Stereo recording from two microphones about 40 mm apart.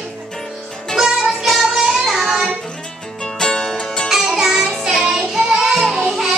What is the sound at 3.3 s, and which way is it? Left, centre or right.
Music, centre.